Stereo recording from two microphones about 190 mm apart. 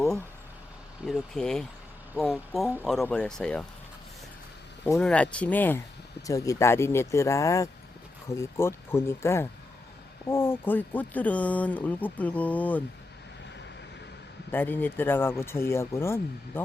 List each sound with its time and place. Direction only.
1.0 s speech: centre (ahead or behind)
4.9 s speech: 5° left (ahead or behind)
14.5 s speech: 10° left (ahead or behind)